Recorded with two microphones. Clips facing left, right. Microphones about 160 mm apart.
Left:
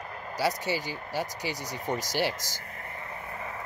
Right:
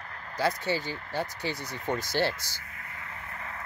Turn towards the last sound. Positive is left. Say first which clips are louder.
# left 3 dB
turn(degrees=15)  # may be behind; listen again after turning